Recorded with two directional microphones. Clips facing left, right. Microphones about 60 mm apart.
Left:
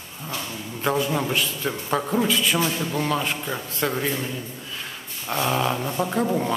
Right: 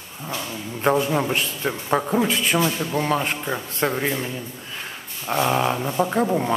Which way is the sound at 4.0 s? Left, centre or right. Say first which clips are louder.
Right 2 dB; centre.